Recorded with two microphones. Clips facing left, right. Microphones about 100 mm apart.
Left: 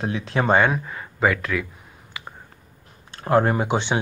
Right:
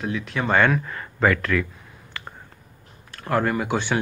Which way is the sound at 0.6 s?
15° left (ahead or behind).